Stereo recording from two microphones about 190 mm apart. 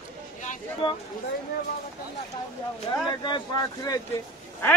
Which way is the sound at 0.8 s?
25° left (ahead or behind).